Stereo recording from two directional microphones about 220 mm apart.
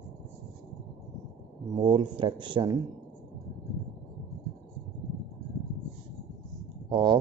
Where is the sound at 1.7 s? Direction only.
20° right (ahead or behind).